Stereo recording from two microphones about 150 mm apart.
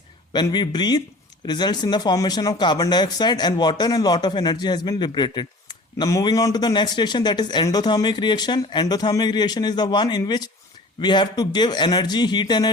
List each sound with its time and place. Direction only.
0.3 s speech: 30° left (ahead or behind)